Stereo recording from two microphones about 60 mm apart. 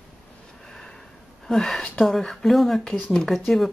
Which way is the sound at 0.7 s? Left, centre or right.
Centre.